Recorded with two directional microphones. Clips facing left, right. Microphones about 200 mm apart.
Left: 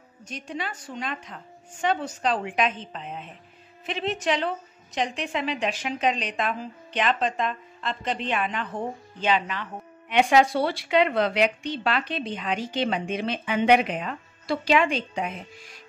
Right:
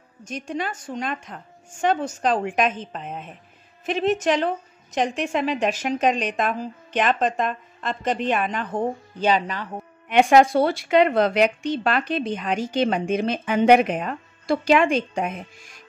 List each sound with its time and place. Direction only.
0.2 s a woman's voice: 45° right (ahead or behind)